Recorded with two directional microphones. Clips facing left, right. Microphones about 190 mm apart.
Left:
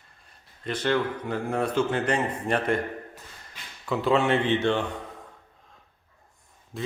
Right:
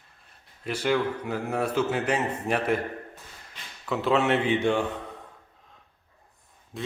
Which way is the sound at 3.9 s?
Centre (ahead or behind).